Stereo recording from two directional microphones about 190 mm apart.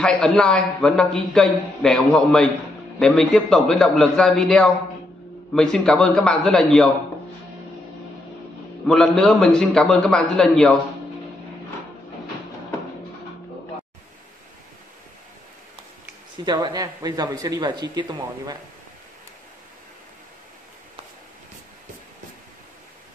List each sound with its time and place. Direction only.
0.0 s a man's voice: 5° left (ahead or behind)
8.8 s a man's voice: 5° left (ahead or behind)
16.4 s speech: 20° right (ahead or behind)